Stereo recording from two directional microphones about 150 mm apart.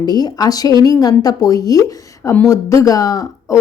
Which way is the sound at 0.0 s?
25° left (ahead or behind).